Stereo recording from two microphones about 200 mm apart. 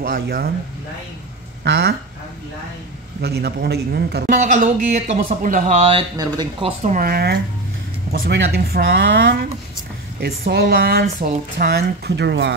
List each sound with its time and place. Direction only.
0.0 s speech: 45° right (ahead or behind)
1.6 s speech: 55° right (ahead or behind)
3.2 s speech: 50° right (ahead or behind)
4.4 s speech: 40° right (ahead or behind)
6.8 s speech: 40° right (ahead or behind)
11.5 s speech: 55° right (ahead or behind)